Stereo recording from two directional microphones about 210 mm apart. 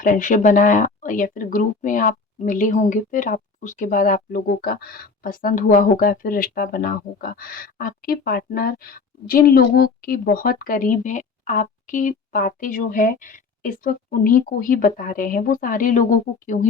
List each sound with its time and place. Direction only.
0.0 s speech: 40° left (ahead or behind)